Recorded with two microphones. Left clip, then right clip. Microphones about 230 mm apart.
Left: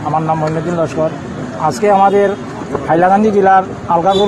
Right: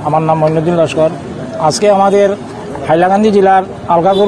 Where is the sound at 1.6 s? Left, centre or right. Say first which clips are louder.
Right 1 dB; right.